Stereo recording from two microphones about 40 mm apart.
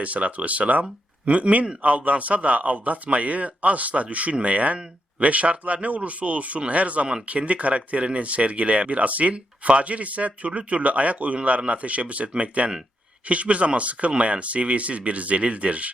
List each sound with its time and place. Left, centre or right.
0.0 s speech: right